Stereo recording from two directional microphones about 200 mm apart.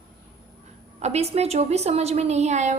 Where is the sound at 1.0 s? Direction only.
30° right (ahead or behind).